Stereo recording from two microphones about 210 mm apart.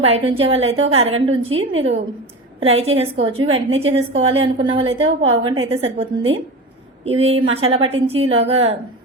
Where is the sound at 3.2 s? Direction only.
75° right (ahead or behind).